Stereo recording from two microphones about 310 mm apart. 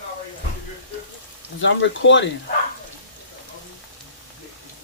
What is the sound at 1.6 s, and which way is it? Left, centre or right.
Speech, left.